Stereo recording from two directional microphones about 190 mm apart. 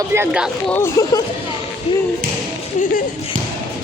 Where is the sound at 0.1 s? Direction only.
15° right (ahead or behind).